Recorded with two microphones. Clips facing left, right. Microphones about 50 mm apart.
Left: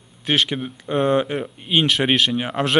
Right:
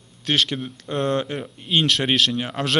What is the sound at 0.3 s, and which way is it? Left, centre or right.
A man's voice, centre.